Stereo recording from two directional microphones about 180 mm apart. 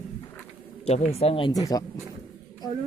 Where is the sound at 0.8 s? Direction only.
40° left (ahead or behind); by 1.8 s 20° left (ahead or behind).